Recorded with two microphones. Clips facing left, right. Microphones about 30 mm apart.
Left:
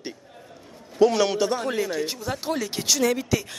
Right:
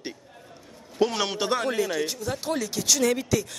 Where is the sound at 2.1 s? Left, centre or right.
Centre.